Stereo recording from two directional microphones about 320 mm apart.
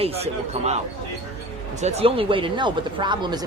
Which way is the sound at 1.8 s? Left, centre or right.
Centre.